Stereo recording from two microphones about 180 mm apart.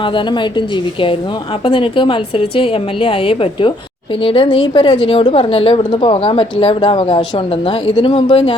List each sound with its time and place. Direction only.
1.6 s a woman's voice: 30° left (ahead or behind)